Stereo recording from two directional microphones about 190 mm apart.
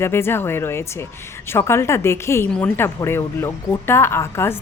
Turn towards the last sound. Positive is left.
turn(degrees=15)  # may be behind; listen again after turning